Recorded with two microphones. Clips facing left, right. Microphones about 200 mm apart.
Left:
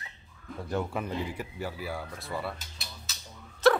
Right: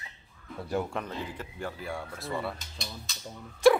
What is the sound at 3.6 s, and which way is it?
Dog, 10° right (ahead or behind).